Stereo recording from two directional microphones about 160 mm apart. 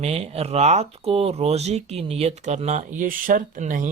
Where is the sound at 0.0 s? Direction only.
40° right (ahead or behind).